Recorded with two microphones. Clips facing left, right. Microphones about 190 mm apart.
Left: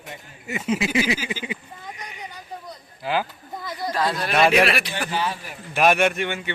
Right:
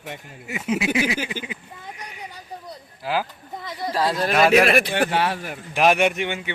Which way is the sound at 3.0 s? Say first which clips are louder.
Even; 5° right (ahead or behind).